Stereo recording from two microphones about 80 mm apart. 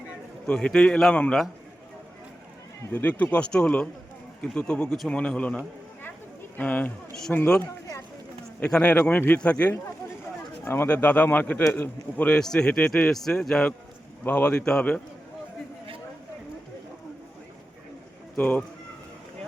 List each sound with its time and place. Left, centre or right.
0.4 s speech: centre
2.9 s speech: centre
6.6 s a man's voice: centre
8.6 s a man's voice: centre
10.8 s a man's voice: centre
12.4 s speech: centre
14.3 s speech: centre
18.3 s a man's voice: centre